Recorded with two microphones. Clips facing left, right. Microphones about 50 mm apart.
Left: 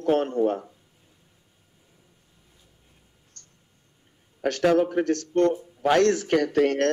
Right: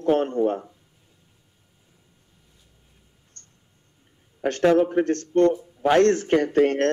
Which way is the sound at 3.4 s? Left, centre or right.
Right.